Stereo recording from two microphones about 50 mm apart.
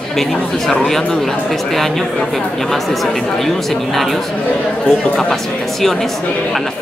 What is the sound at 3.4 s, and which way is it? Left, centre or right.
Speech, centre.